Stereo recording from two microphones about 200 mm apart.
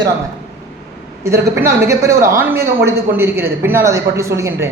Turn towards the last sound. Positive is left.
turn(degrees=-10)  # may be behind; listen again after turning